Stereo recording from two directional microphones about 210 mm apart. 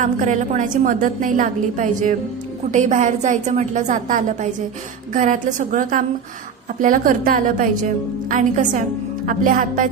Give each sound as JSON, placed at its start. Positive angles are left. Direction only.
{"t": 0.0, "sound": "a woman's voice", "side_deg": -35}